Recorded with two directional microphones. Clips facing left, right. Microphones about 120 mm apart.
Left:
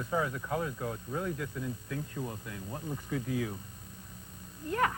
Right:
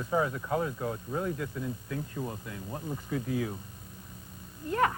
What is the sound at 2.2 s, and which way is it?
Speech, 55° right (ahead or behind).